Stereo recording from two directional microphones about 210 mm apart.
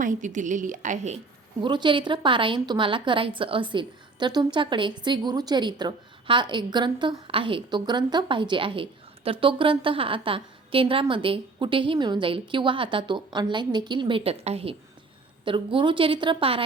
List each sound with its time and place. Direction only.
0.0 s a woman's voice: 35° right (ahead or behind)
1.6 s a woman's voice: 20° right (ahead or behind)